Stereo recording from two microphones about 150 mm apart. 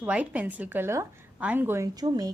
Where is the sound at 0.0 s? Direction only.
10° right (ahead or behind).